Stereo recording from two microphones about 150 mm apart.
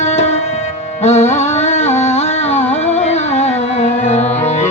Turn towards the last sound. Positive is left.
turn(degrees=50)  # may be behind; listen again after turning